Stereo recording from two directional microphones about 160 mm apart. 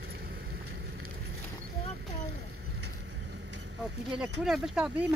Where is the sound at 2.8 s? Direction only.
90° right.